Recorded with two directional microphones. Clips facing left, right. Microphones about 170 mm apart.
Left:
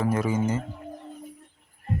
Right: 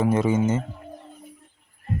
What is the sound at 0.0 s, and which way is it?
Speech, 25° right (ahead or behind).